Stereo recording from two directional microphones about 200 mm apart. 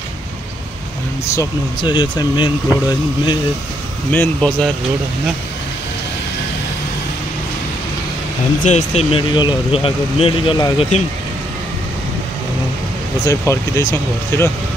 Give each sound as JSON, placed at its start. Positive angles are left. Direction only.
{"t": 1.3, "sound": "speech", "side_deg": 20}
{"t": 4.1, "sound": "speech", "side_deg": 10}
{"t": 8.6, "sound": "speech", "side_deg": 35}
{"t": 13.2, "sound": "speech", "side_deg": 15}